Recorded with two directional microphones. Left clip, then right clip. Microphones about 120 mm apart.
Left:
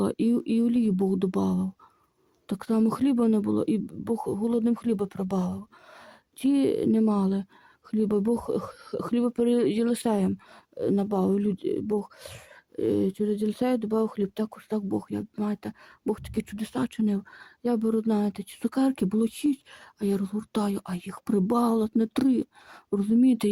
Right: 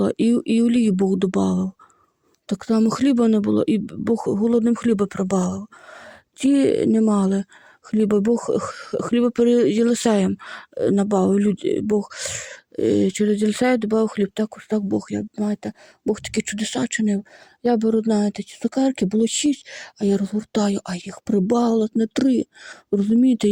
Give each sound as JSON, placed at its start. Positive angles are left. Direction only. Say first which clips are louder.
{"t": 0.0, "sound": "speech", "louder": "right 6 dB", "side_deg": -25}